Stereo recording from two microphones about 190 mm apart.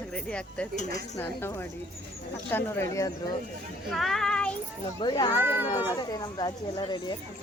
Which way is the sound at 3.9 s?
Centre (ahead or behind).